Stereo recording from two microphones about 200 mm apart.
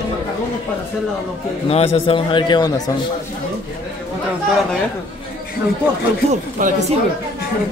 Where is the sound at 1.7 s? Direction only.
30° left (ahead or behind).